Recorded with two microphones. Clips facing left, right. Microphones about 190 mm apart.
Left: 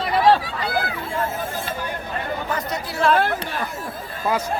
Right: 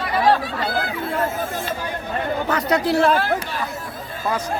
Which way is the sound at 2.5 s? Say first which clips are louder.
Right 9 dB; 70° right (ahead or behind).